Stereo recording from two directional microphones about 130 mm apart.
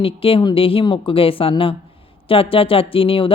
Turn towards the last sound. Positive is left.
turn(degrees=45)  # may be behind; listen again after turning